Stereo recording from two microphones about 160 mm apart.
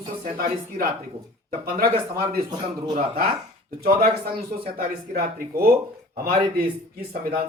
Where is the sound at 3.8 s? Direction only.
70° right (ahead or behind).